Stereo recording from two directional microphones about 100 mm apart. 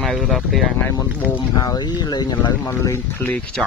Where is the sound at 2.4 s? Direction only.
30° left (ahead or behind).